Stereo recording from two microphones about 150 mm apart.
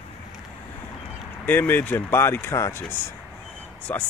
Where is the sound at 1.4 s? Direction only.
10° left (ahead or behind).